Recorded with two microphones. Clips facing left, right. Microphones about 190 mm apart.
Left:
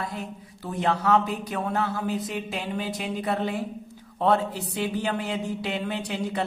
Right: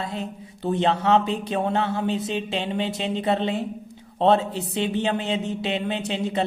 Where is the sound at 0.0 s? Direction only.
25° right (ahead or behind).